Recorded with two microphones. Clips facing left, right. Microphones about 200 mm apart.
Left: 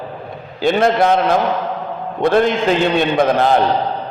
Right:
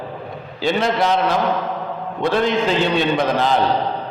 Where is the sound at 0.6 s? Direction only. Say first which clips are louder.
Left 5 dB; 55° left (ahead or behind).